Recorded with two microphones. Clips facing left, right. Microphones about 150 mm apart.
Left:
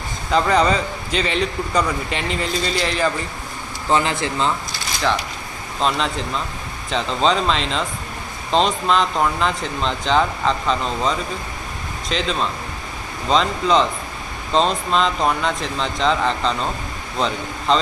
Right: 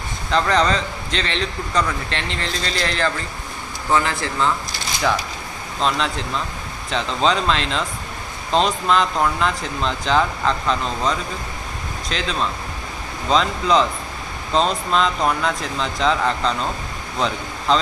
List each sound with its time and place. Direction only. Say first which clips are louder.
0.3 s a man's voice: left 2 dB; 5° left (ahead or behind)
3.8 s speech: left 1 dB; 20° left (ahead or behind)
5.8 s speech: left 1 dB; centre (ahead or behind)